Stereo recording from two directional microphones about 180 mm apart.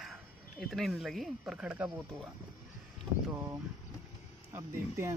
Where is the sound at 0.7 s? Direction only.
Centre (ahead or behind).